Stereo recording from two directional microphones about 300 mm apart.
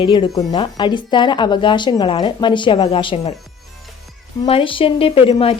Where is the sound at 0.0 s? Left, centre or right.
Centre.